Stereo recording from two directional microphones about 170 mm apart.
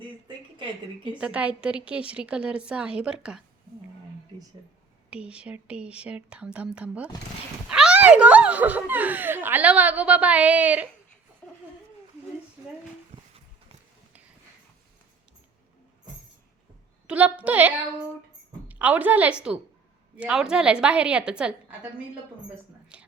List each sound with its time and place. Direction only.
1.2 s speech: 5° right (ahead or behind)
5.1 s speech: 5° right (ahead or behind)
13.1 s music: 45° right (ahead or behind)
17.1 s a woman's voice: 10° right (ahead or behind)
22.9 s a sound: 5° right (ahead or behind)